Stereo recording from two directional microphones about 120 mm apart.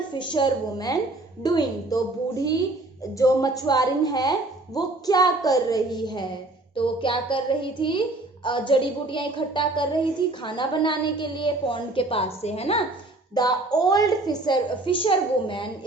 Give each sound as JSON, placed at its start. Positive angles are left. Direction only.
{"t": 0.1, "sound": "a woman's voice", "side_deg": 40}
{"t": 3.2, "sound": "a woman's voice", "side_deg": 30}
{"t": 13.3, "sound": "a woman's voice", "side_deg": 35}